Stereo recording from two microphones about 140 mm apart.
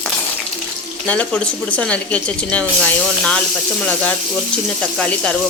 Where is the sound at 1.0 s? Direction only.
10° left (ahead or behind).